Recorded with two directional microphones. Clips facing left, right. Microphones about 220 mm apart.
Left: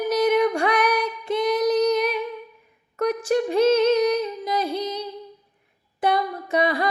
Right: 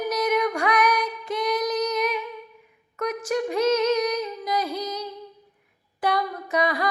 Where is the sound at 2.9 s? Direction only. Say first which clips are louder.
Left 5 dB; 30° left (ahead or behind).